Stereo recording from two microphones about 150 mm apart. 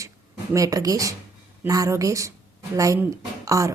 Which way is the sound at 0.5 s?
25° right (ahead or behind).